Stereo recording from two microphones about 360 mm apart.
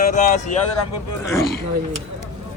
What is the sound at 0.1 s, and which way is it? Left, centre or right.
Speech, centre.